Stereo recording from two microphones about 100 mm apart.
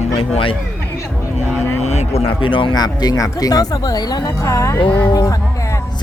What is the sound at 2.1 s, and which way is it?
Speech, 60° left (ahead or behind).